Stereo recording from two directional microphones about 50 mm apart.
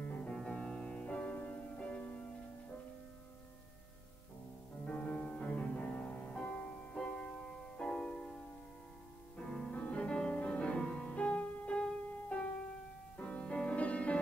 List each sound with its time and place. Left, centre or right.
0.0 s music: left
0.5 s music: centre
1.3 s music: left
1.8 s music: left
4.8 s music: left
5.8 s music: centre
6.4 s music: left
9.4 s music: centre